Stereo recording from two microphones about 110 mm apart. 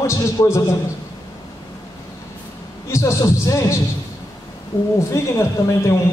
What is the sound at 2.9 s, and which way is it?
Speech, 30° left (ahead or behind).